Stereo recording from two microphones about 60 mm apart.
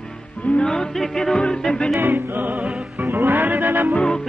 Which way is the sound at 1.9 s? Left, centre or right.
Right.